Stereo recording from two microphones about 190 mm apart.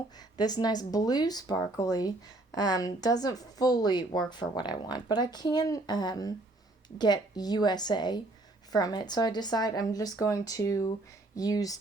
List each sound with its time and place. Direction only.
0.2 s speech: 20° left (ahead or behind)